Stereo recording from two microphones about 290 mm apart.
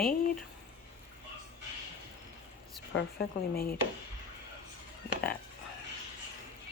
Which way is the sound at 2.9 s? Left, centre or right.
Left.